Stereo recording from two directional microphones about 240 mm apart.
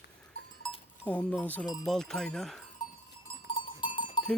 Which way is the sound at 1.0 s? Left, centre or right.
Centre.